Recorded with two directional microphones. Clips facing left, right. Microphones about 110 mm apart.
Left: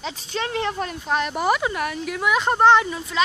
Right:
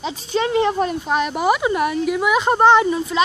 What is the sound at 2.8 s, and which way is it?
Speech, 25° right (ahead or behind).